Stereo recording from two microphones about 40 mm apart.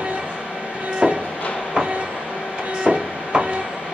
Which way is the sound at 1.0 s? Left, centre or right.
Centre.